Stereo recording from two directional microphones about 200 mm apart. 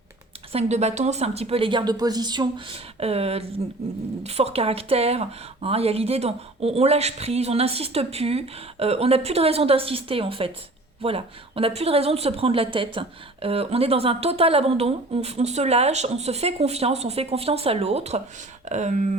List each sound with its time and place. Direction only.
0.5 s a woman's voice: 35° right (ahead or behind)